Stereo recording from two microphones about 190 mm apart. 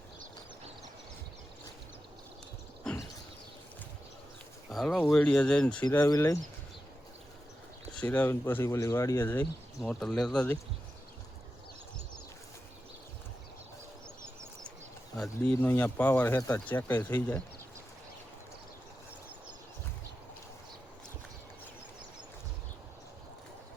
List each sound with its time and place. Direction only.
2.8 s a sound: 5° left (ahead or behind)
4.7 s speech: centre (ahead or behind); by 6.4 s 15° left (ahead or behind)
8.0 s speech: 10° left (ahead or behind)
15.1 s speech: 5° left (ahead or behind)